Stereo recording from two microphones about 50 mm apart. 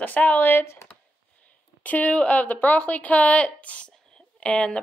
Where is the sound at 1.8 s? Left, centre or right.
Left.